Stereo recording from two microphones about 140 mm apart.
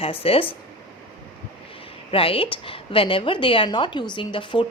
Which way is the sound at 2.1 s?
40° left (ahead or behind).